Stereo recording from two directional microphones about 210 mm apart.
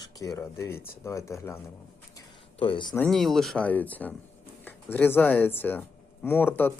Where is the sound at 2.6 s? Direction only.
25° left (ahead or behind).